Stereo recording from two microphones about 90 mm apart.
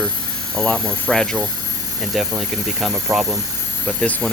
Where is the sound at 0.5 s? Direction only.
10° left (ahead or behind).